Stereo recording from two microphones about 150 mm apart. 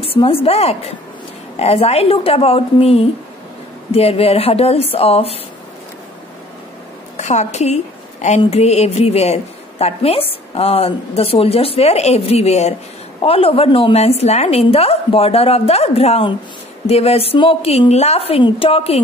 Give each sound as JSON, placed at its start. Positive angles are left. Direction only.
{"t": 0.0, "sound": "a woman's voice", "side_deg": 40}
{"t": 7.2, "sound": "a woman's voice", "side_deg": 50}